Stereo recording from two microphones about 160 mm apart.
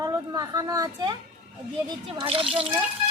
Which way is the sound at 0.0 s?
20° right (ahead or behind).